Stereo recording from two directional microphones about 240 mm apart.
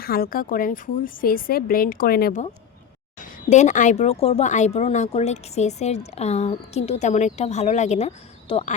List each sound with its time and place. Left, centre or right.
0.0 s a woman's voice: left